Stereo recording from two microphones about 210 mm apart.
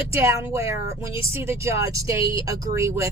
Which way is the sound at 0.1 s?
15° right (ahead or behind).